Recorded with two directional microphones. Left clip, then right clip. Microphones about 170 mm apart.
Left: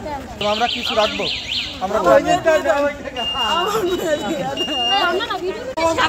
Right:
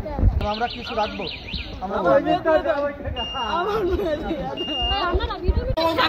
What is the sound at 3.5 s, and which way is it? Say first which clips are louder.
Speech: left 3 dB; 15° left (ahead or behind).